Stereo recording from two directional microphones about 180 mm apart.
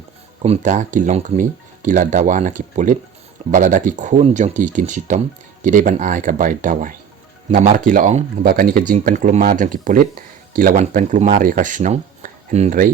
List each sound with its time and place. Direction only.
0.4 s speech: 40° right (ahead or behind)